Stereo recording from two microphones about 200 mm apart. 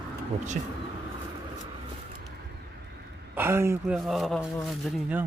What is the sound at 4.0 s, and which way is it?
Speech, centre (ahead or behind).